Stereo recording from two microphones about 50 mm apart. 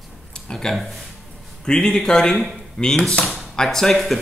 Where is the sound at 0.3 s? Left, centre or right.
Centre.